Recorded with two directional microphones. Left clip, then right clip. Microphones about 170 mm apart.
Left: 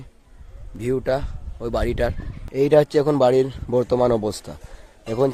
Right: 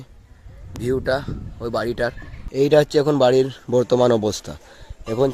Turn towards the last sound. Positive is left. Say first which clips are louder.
# right 1 dB
turn(degrees=0)  # may be behind; listen again after turning